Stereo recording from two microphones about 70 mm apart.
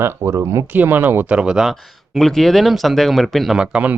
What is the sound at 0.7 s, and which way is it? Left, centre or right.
Speech, right.